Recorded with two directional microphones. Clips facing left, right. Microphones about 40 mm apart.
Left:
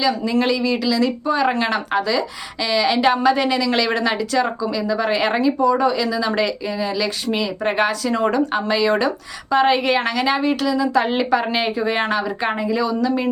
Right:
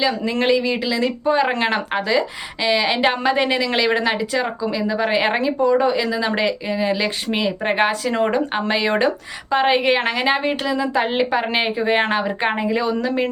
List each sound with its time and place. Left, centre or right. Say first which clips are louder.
0.0 s a woman's voice: left 1 dB; right